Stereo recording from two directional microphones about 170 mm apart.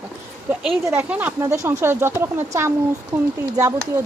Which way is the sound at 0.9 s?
10° right (ahead or behind).